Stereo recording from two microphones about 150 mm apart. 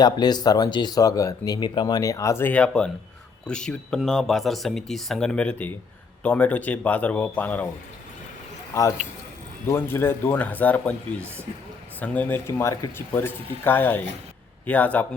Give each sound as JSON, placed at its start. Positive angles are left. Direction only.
{"t": 0.0, "sound": "speech", "side_deg": 30}
{"t": 9.6, "sound": "speech", "side_deg": 15}